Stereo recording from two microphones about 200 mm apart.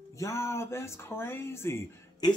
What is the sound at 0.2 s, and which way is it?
Speech, 15° left (ahead or behind).